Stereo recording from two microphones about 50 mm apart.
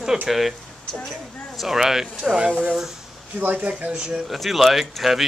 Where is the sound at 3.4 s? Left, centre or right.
Right.